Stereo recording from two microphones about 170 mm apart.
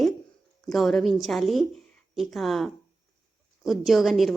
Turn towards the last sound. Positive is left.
turn(degrees=0)  # may be behind; listen again after turning